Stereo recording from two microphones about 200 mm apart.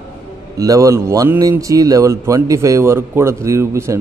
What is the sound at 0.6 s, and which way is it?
A man's voice, 15° right (ahead or behind).